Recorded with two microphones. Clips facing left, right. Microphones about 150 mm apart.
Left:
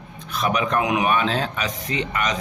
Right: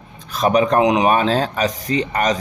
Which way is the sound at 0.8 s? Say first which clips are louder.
Right 6 dB; 25° right (ahead or behind).